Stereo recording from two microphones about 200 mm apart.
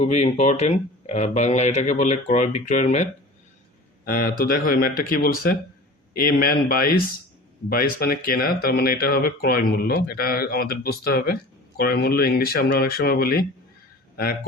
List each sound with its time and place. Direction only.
0.0 s speech: 35° left (ahead or behind)
4.0 s speech: 45° left (ahead or behind)